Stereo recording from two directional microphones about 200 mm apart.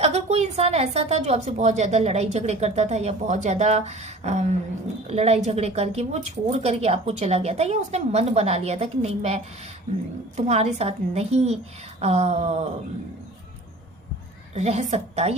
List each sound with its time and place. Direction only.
0.0 s a woman's voice: 30° right (ahead or behind)
14.5 s a woman's voice: 35° right (ahead or behind)